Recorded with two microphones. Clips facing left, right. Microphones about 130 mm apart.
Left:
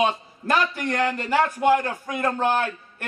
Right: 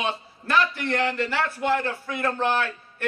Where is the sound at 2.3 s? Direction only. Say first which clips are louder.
Left 2 dB; 45° left (ahead or behind).